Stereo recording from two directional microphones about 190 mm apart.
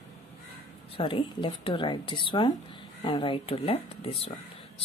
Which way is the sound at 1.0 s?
30° left (ahead or behind).